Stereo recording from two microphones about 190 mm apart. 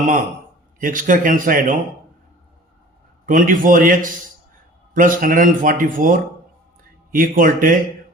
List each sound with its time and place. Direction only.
0.8 s speech: 45° right (ahead or behind)
3.2 s speech: 45° right (ahead or behind)